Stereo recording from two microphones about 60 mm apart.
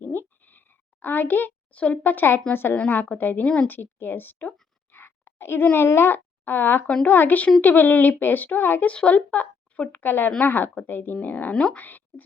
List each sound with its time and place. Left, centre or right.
0.0 s a sound: left
1.0 s a child's voice: left
2.7 s speech: left
3.4 s a woman's voice: centre
3.7 s a child's voice: left
4.9 s a sound: left
5.7 s a child's voice: left
6.8 s a child's voice: left
8.9 s a child's voice: left
11.5 s a woman's voice: centre
11.8 s speech: left